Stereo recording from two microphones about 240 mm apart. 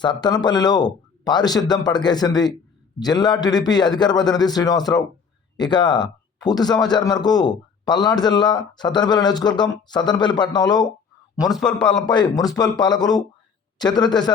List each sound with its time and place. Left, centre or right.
0.0 s a man's voice: centre
11.3 s a man's voice: centre
12.0 s a man's voice: centre